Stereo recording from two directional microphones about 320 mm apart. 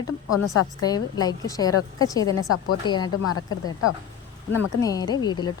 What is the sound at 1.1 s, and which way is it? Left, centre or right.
Speech, centre.